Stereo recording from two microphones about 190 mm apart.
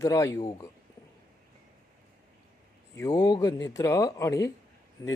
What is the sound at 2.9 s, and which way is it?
A man's voice, 20° left (ahead or behind).